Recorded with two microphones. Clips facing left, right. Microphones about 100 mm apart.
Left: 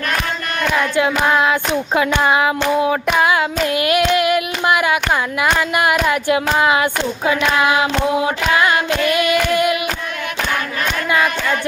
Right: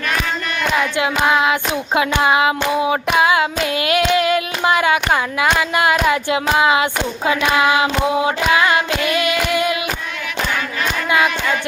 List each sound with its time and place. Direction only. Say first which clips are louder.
0.9 s child singing: left 2 dB; 15° right (ahead or behind)
8.2 s female singing: even; 25° right (ahead or behind)